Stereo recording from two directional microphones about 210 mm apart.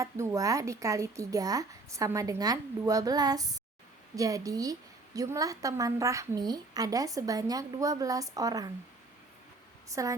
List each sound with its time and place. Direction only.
0.0 s a woman's voice: 15° right (ahead or behind)
9.9 s a woman's voice: 15° right (ahead or behind)